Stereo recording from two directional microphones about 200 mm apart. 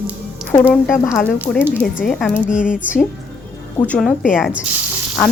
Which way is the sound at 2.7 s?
5° right (ahead or behind).